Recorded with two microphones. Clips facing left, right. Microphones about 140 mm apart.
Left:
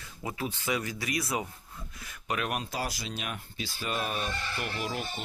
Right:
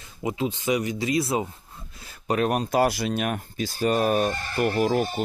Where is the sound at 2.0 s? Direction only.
30° right (ahead or behind).